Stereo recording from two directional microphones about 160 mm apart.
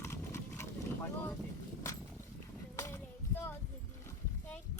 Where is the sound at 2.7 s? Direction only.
20° left (ahead or behind).